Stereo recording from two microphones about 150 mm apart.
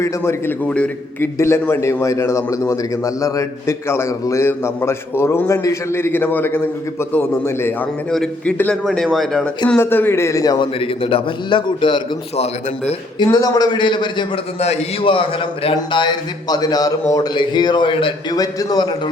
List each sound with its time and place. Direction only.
0.0 s a man's voice: 15° left (ahead or behind)
9.6 s a man's voice: 15° left (ahead or behind)
10.8 s a man's voice: 35° left (ahead or behind)
14.6 s a man's voice: 45° left (ahead or behind); by 18.9 s 30° left (ahead or behind)